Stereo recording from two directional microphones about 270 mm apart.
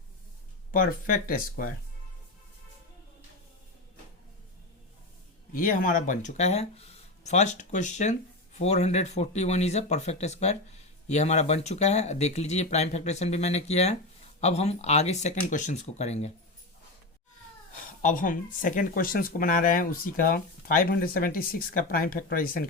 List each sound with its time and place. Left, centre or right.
0.7 s speech: left
5.5 s speech: left
17.7 s speech: left